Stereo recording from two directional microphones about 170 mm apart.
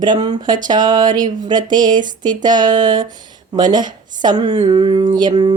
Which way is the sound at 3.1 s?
25° right (ahead or behind).